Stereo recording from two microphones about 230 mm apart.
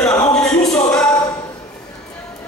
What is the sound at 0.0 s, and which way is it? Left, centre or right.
Music, centre.